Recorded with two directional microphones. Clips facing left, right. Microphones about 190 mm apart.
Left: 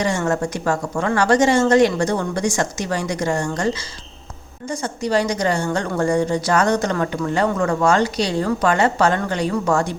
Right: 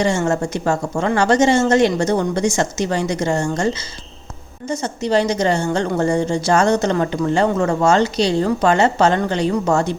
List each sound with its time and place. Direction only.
0.0 s a woman's voice: 25° right (ahead or behind)